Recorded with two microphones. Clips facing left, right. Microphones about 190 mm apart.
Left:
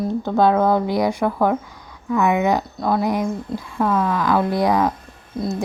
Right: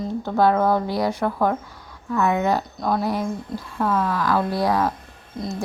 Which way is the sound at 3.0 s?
15° left (ahead or behind).